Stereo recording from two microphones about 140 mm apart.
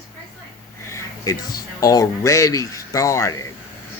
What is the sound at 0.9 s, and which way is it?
Speech, 20° left (ahead or behind).